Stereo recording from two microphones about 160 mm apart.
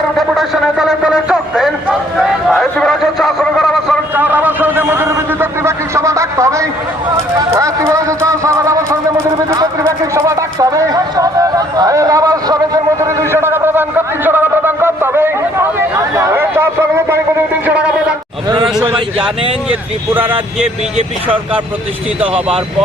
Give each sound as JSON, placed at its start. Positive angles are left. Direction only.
{"t": 0.2, "sound": "a man's voice", "side_deg": 0}
{"t": 4.1, "sound": "a man's voice", "side_deg": -10}
{"t": 16.1, "sound": "a sound", "side_deg": -15}
{"t": 17.7, "sound": "speech", "side_deg": -10}
{"t": 18.4, "sound": "a man's voice", "side_deg": -25}
{"t": 22.2, "sound": "speech", "side_deg": -5}